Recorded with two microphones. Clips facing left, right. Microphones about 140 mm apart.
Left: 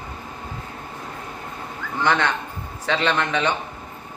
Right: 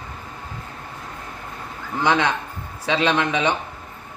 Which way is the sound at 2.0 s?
10° right (ahead or behind).